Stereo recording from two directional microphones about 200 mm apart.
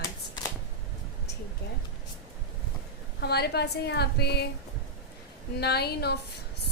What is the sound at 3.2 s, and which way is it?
A woman's voice, 55° left (ahead or behind).